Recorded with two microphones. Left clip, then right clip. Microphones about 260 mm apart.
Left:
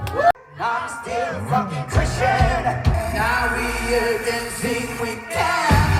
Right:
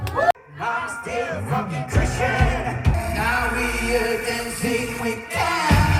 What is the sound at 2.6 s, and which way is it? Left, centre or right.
Male singing, left.